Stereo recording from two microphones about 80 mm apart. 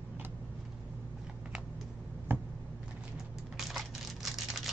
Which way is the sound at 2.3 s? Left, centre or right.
Right.